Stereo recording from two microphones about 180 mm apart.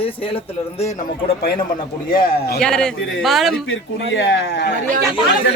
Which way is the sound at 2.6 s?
5° left (ahead or behind).